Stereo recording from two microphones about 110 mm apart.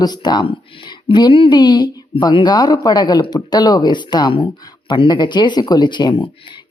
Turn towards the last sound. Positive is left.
turn(degrees=45)  # may be behind; listen again after turning